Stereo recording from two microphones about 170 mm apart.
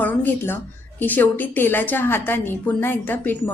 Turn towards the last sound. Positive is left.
turn(degrees=10)  # may be behind; listen again after turning